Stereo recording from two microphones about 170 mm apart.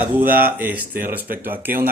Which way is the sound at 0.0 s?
10° right (ahead or behind).